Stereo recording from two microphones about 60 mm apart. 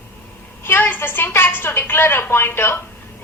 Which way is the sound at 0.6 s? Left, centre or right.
Left.